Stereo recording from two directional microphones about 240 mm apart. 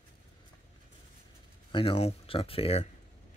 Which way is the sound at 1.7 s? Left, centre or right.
Left.